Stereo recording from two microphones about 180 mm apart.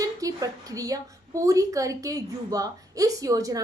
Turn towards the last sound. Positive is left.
turn(degrees=-20)  # may be behind; listen again after turning